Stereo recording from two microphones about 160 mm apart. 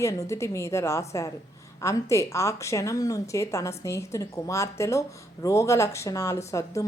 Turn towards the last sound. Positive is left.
turn(degrees=20)  # may be behind; listen again after turning